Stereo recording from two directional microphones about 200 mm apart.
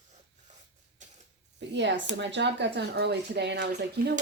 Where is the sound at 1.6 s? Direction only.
60° right (ahead or behind).